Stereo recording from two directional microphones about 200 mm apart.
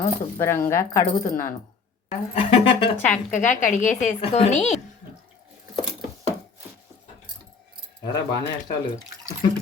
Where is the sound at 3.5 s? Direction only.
40° left (ahead or behind).